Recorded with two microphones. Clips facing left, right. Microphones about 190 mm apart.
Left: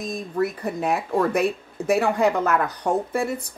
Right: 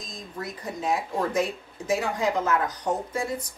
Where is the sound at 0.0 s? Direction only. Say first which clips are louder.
Left 12 dB; 60° left (ahead or behind).